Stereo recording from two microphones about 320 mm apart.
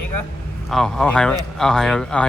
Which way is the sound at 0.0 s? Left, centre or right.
Left.